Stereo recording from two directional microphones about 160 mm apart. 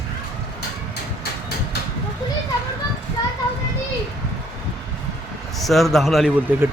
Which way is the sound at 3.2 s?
25° left (ahead or behind).